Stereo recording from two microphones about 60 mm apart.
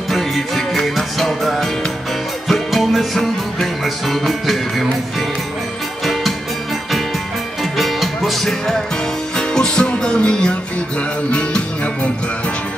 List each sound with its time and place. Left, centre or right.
0.1 s music: centre
7.7 s music: centre